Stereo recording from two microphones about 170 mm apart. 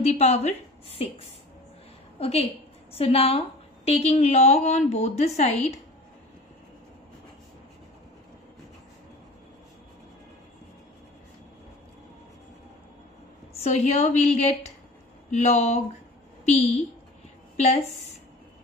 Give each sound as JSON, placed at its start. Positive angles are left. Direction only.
{"t": 0.0, "sound": "a woman's voice", "side_deg": 40}
{"t": 13.5, "sound": "a woman's voice", "side_deg": 40}
{"t": 17.6, "sound": "a woman's voice", "side_deg": 40}